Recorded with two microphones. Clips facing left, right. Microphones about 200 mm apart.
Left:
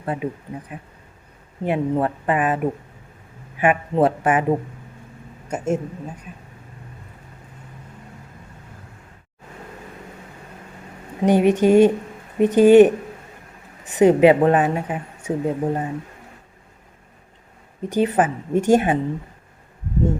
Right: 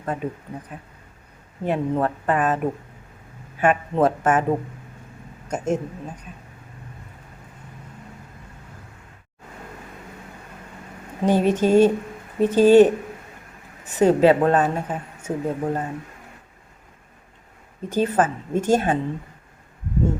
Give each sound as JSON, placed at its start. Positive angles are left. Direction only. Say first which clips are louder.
{"t": 0.0, "sound": "speech", "louder": "left 2 dB", "side_deg": 10}
{"t": 1.6, "sound": "speech", "louder": "left 1 dB", "side_deg": 10}
{"t": 3.6, "sound": "speech", "louder": "left 1 dB", "side_deg": 10}
{"t": 5.5, "sound": "speech", "louder": "left 1 dB", "side_deg": 5}
{"t": 11.2, "sound": "speech", "louder": "left 3 dB", "side_deg": 15}
{"t": 17.8, "sound": "speech", "louder": "left 2 dB", "side_deg": 15}